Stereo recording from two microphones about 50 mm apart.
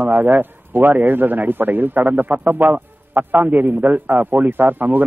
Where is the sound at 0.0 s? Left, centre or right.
Right.